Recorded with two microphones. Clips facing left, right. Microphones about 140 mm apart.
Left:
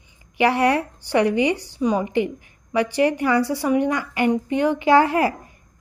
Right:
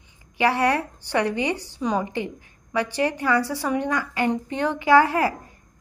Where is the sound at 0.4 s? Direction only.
15° left (ahead or behind).